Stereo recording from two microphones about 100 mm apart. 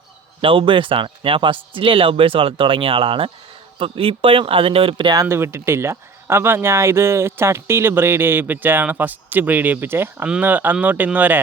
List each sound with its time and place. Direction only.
0.4 s speech: 60° right (ahead or behind)
5.2 s speech: 25° right (ahead or behind)